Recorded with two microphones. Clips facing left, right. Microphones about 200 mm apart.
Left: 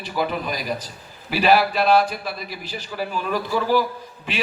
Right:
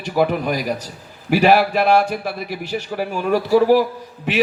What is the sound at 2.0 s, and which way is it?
A man's voice, 70° right (ahead or behind).